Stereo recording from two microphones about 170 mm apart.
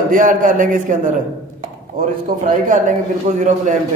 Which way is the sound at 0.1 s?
50° right (ahead or behind).